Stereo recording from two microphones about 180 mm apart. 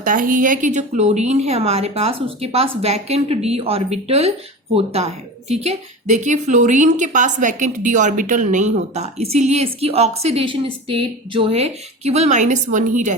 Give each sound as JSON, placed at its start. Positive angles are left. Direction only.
{"t": 0.0, "sound": "speech", "side_deg": -50}